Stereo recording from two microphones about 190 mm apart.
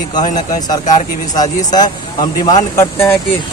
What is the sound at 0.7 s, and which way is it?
A man's voice, 20° left (ahead or behind).